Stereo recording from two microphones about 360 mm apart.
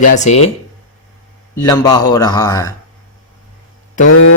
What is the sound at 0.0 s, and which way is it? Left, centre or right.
Speech, left.